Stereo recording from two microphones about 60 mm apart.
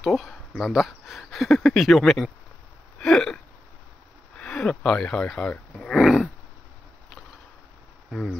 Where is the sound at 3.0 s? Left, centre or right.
Centre.